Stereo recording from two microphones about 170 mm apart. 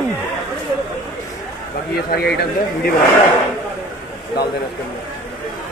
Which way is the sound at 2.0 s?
65° left (ahead or behind).